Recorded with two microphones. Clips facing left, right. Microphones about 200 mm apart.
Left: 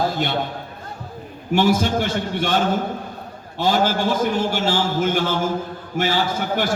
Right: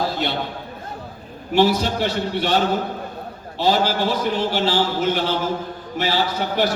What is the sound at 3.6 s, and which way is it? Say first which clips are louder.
A man's voice: even; 50° left (ahead or behind).